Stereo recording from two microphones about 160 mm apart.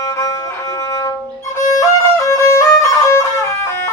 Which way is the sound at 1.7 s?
20° left (ahead or behind).